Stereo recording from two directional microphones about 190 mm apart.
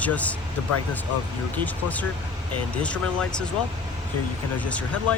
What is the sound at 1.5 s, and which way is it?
Speech, 10° left (ahead or behind).